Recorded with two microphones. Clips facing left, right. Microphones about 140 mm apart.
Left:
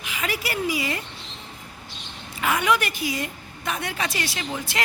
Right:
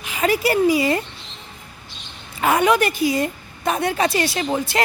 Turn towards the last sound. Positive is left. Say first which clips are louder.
# right 9 dB
turn(degrees=-35)  # may be behind; listen again after turning